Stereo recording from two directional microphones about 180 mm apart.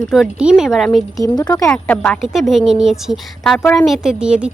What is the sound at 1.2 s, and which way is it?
Speech, 20° left (ahead or behind).